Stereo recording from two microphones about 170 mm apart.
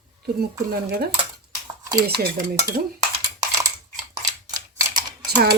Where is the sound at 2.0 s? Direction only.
65° right (ahead or behind).